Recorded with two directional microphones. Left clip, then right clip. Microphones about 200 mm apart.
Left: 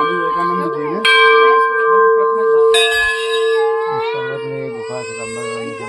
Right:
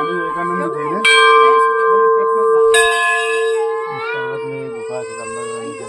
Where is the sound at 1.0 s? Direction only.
60° right (ahead or behind).